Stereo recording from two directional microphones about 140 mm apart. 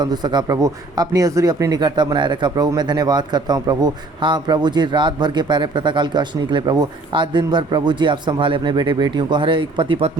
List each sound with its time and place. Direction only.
0.0 s a man's voice: 30° right (ahead or behind)